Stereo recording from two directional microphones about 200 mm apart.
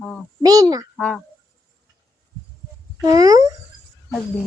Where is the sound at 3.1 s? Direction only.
20° right (ahead or behind).